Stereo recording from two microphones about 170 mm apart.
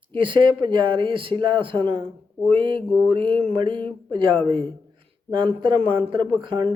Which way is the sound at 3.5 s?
30° right (ahead or behind).